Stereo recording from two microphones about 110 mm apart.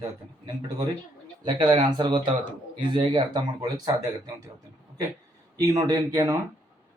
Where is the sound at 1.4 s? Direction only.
40° right (ahead or behind).